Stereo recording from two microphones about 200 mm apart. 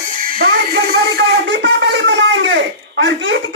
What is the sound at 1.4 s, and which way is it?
Speech, 65° right (ahead or behind).